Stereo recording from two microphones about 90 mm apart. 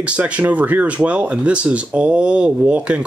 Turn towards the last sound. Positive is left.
turn(degrees=-15)  # may be behind; listen again after turning